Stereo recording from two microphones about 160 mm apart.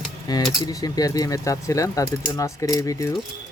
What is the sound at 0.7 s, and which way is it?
Speech, 20° left (ahead or behind).